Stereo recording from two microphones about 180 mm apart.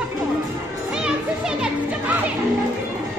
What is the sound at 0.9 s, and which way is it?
Music, 5° right (ahead or behind).